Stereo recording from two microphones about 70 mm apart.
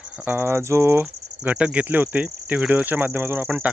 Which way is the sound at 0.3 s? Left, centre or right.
Right.